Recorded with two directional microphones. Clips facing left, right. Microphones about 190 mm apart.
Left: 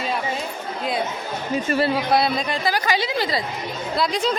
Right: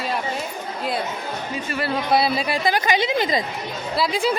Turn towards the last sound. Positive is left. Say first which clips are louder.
# right 1 dB
turn(degrees=-5)  # may be behind; listen again after turning